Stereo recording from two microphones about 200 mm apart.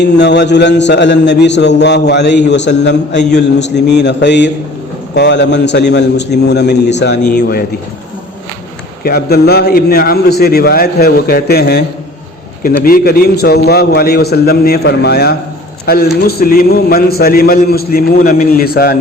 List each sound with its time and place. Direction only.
0.0 s a man's voice: 60° left (ahead or behind)
9.0 s a man's voice: 50° left (ahead or behind)